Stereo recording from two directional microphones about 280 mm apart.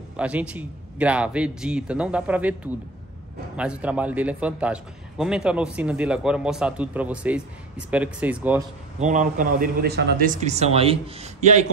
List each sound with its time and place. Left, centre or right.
0.2 s a man's voice: centre
9.0 s a man's voice: right